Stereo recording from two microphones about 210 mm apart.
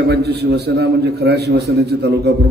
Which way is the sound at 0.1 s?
50° right (ahead or behind).